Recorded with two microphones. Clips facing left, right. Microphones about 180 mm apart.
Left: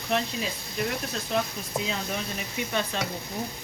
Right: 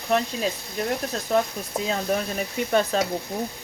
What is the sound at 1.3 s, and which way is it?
Speech, 45° right (ahead or behind).